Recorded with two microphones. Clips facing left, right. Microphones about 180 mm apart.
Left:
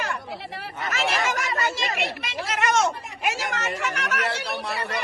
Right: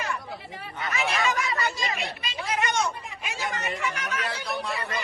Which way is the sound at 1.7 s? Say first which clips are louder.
Left 3 dB; 75° left (ahead or behind).